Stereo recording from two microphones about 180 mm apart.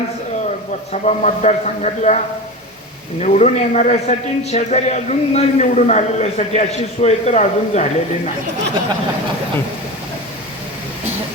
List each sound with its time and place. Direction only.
1.0 s a man's voice: 40° left (ahead or behind)
3.2 s a man's voice: 35° left (ahead or behind)